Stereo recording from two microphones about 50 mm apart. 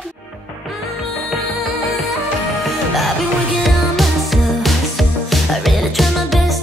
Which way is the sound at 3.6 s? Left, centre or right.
Centre.